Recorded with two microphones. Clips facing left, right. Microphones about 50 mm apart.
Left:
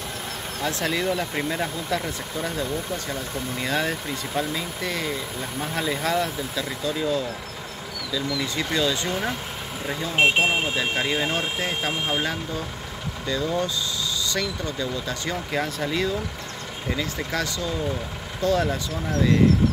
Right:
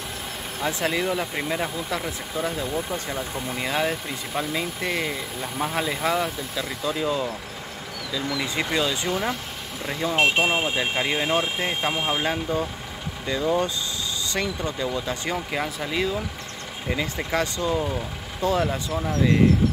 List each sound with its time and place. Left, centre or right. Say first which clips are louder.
0.6 s speech: right 1 dB; centre
9.1 s speech: right 1 dB; centre
10.7 s speech: even; centre
18.4 s speech: left 1 dB; centre